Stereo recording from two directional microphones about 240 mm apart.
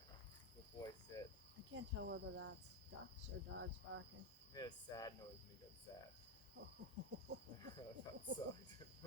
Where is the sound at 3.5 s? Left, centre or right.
Right.